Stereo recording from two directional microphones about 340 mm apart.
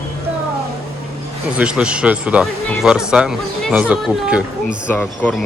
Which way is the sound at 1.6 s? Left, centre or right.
Centre.